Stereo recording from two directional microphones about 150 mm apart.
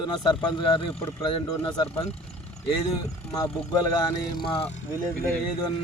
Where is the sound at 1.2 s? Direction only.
25° left (ahead or behind).